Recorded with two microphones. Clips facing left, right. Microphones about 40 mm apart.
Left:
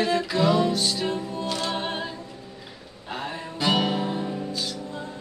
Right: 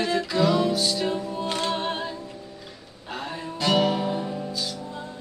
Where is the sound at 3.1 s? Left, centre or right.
Centre.